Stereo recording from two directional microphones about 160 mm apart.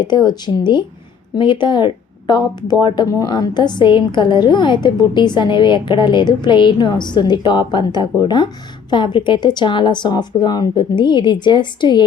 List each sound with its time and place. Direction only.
0.0 s speech: 25° left (ahead or behind)